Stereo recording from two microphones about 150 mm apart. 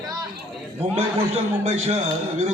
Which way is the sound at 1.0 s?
45° right (ahead or behind).